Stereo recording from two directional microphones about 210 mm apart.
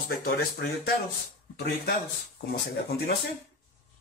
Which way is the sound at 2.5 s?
50° left (ahead or behind).